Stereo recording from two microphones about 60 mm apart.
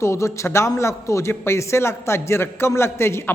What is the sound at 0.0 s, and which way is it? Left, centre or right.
A man's voice, left.